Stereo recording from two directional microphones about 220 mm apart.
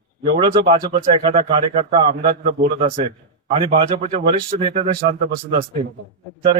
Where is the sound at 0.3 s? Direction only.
20° right (ahead or behind).